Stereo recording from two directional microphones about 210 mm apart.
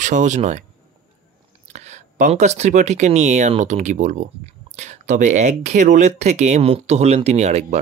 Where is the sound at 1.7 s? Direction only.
35° right (ahead or behind).